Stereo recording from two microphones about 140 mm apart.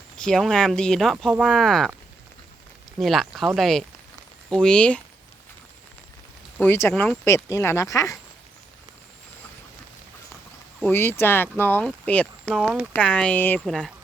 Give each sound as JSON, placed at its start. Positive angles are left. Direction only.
{"t": 0.2, "sound": "speech", "side_deg": 5}
{"t": 3.0, "sound": "speech", "side_deg": 0}
{"t": 6.6, "sound": "speech", "side_deg": 15}
{"t": 10.8, "sound": "speech", "side_deg": 15}
{"t": 12.6, "sound": "speech", "side_deg": -10}
{"t": 13.0, "sound": "speech", "side_deg": 5}
{"t": 13.7, "sound": "speech", "side_deg": 0}